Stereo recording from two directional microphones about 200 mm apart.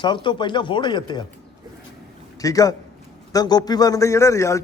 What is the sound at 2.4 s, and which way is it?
A man's voice, 15° left (ahead or behind).